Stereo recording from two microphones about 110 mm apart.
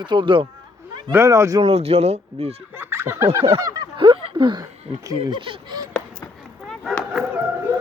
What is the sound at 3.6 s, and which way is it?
Speech, 30° right (ahead or behind).